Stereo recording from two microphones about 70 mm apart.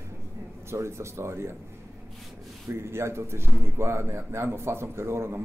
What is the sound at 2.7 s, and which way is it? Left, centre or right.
Speech, right.